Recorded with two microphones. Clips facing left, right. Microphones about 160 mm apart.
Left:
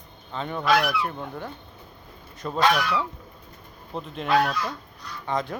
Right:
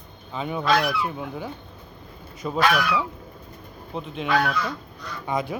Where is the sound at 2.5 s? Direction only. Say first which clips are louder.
Even; 20° left (ahead or behind).